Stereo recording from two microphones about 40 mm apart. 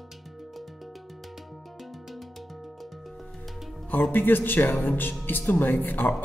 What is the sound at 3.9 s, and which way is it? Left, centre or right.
Speech, left.